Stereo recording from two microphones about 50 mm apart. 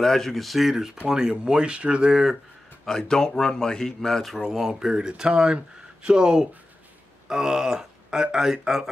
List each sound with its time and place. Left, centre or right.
0.0 s speech: centre; by 2.1 s right
2.8 s speech: centre
4.5 s speech: centre